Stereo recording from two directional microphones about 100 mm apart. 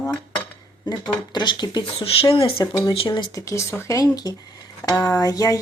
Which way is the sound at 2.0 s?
65° left (ahead or behind).